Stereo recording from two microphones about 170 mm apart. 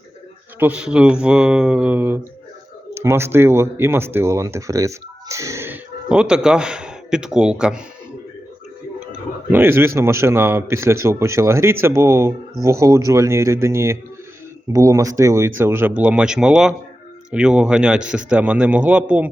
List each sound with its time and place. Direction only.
0.6 s a man's voice: 5° right (ahead or behind)
9.5 s a man's voice: 15° right (ahead or behind)